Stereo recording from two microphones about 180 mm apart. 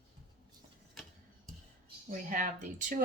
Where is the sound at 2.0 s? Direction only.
45° right (ahead or behind).